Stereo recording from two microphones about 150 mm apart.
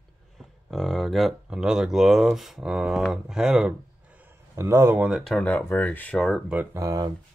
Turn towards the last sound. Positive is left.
turn(degrees=-25)  # may be behind; listen again after turning